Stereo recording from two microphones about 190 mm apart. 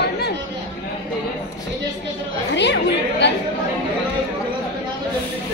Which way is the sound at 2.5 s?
65° left (ahead or behind).